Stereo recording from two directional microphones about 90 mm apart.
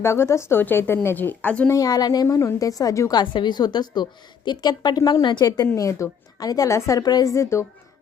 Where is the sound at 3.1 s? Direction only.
55° left (ahead or behind).